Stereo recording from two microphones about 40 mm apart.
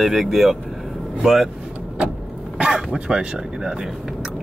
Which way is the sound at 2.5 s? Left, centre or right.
Right.